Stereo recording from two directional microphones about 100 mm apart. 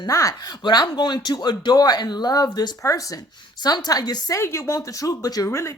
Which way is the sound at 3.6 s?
40° left (ahead or behind).